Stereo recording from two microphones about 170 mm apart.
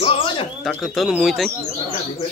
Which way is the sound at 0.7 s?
Centre (ahead or behind).